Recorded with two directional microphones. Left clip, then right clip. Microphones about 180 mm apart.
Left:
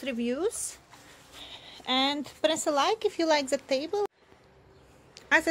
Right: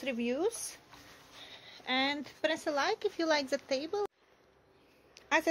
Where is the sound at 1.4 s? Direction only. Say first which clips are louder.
Left 6 dB; 20° left (ahead or behind).